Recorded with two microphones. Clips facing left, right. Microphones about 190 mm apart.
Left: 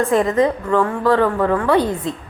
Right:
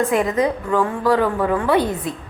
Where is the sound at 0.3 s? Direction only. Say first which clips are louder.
Left 3 dB; 15° right (ahead or behind).